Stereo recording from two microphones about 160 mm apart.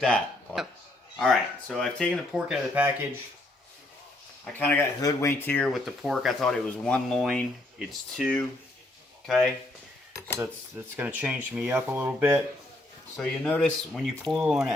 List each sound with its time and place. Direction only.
0.0 s speech: centre (ahead or behind)
4.5 s speech: 10° left (ahead or behind)
5.6 s speech: centre (ahead or behind)
10.1 s cutlery: 15° left (ahead or behind)
10.9 s speech: 10° right (ahead or behind)
13.1 s speech: 5° left (ahead or behind)